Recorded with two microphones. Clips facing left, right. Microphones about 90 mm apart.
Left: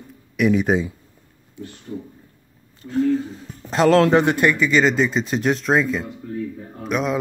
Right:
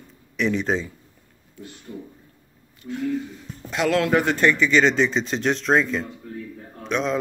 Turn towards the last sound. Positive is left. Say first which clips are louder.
# left 2 dB
turn(degrees=5)  # may be behind; listen again after turning